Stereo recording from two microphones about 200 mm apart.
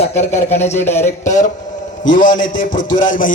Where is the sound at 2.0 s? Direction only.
40° left (ahead or behind).